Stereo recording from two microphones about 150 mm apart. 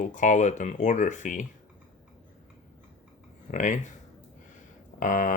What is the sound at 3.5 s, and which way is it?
Speech, 55° left (ahead or behind).